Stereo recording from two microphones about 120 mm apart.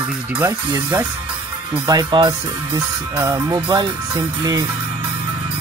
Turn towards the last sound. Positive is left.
turn(degrees=-30)  # may be behind; listen again after turning